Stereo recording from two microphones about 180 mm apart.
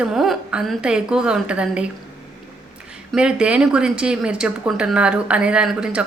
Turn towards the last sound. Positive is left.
turn(degrees=-5)  # may be behind; listen again after turning